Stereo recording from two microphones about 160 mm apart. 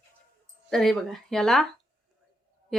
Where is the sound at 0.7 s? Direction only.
Centre (ahead or behind).